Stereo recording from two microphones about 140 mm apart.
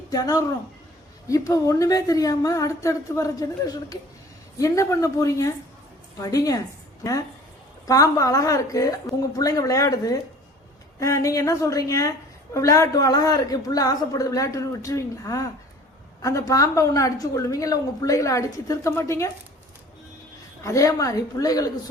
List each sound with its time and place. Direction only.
0.1 s a woman's voice: 25° left (ahead or behind)
20.6 s a woman's voice: 20° left (ahead or behind)